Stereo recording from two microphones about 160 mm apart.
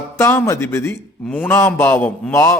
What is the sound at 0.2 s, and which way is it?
A man's voice, 15° left (ahead or behind).